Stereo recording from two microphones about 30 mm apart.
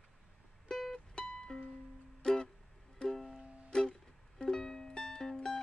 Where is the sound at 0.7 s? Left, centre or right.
Centre.